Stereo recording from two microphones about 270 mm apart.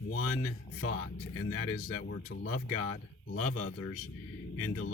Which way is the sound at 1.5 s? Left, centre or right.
Left.